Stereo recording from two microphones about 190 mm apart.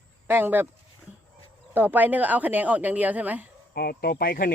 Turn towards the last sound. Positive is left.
turn(degrees=50)  # may be behind; listen again after turning